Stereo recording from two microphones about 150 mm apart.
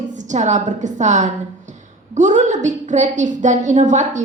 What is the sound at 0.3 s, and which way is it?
A woman's voice, 50° right (ahead or behind).